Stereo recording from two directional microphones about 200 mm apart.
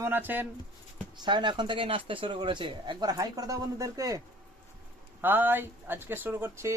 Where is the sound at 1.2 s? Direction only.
25° right (ahead or behind).